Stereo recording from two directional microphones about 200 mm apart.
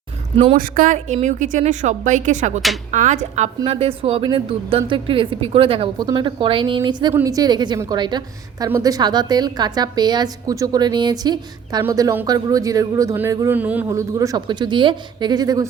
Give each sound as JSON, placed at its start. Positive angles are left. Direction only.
{"t": 0.5, "sound": "a woman's voice", "side_deg": -45}